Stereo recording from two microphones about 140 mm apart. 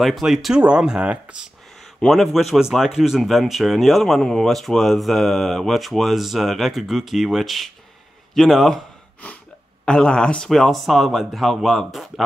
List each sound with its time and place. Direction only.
0.0 s speech: centre (ahead or behind)